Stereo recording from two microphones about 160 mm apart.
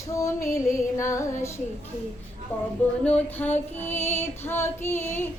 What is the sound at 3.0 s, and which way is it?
Female singing, 10° left (ahead or behind).